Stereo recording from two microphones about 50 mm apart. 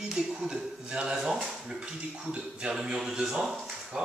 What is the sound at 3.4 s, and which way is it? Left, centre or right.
Speech, centre.